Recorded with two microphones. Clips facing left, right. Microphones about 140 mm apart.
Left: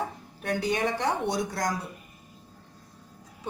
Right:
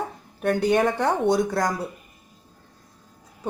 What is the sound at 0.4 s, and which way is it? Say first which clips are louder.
Speech: right 7 dB; 60° right (ahead or behind).